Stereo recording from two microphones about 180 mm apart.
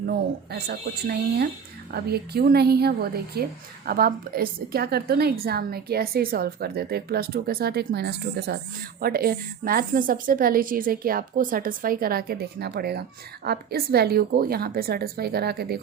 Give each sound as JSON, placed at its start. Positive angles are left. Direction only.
{"t": 0.0, "sound": "a woman's voice", "side_deg": -60}